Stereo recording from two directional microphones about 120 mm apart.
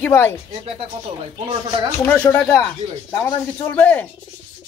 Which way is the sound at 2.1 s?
15° left (ahead or behind).